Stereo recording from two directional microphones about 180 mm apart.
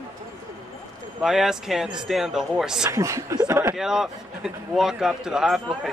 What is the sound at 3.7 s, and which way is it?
Speech, centre (ahead or behind).